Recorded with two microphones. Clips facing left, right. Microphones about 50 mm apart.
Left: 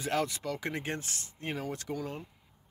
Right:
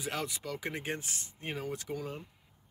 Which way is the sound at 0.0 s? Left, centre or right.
Centre.